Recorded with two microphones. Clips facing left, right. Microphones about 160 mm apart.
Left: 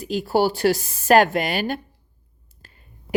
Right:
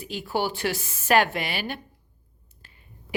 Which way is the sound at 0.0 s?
40° left (ahead or behind).